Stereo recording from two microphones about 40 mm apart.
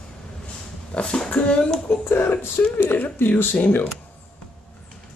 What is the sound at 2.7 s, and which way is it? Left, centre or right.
Speech, left.